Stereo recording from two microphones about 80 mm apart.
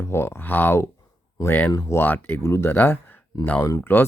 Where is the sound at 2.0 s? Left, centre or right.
Left.